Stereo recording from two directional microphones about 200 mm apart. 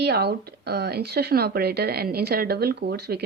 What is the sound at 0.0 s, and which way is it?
A woman's voice, 55° right (ahead or behind).